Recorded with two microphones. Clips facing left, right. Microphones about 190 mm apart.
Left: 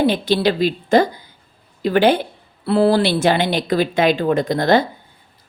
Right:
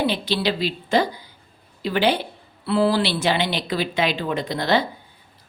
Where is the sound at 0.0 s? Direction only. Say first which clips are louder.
Left 6 dB; 50° left (ahead or behind).